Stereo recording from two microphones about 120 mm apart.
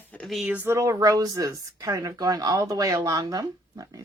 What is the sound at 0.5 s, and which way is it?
Speech, 20° right (ahead or behind).